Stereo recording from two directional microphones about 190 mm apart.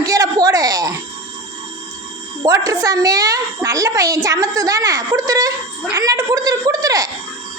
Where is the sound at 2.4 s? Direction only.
20° right (ahead or behind).